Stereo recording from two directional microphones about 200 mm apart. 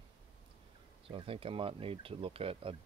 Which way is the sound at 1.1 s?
25° right (ahead or behind).